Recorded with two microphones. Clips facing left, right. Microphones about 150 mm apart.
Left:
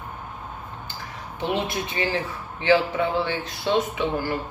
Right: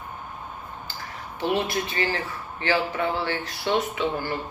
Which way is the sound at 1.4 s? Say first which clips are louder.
Right 1 dB; 20° left (ahead or behind).